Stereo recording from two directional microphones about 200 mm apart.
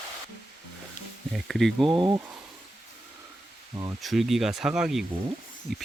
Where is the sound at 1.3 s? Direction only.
Centre (ahead or behind).